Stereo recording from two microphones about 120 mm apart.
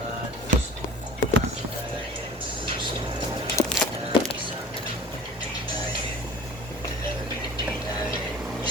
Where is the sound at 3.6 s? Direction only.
25° left (ahead or behind).